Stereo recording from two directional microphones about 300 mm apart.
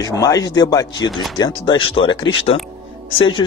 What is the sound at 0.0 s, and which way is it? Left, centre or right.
Speech, centre.